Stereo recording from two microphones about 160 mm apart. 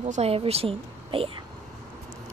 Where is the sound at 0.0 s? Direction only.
40° right (ahead or behind).